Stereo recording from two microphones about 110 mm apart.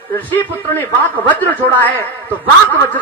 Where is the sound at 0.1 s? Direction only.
20° left (ahead or behind).